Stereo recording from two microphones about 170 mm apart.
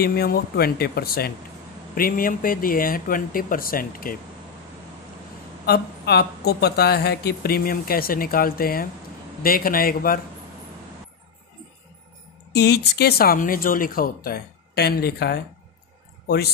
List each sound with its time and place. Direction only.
0.0 s speech: 65° left (ahead or behind)
5.7 s speech: 70° left (ahead or behind)
12.5 s speech: 80° left